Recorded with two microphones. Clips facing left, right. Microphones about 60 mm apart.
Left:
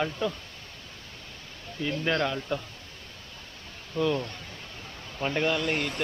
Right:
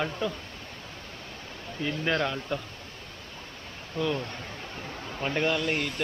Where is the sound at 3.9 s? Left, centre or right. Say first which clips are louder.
Left 2 dB; centre.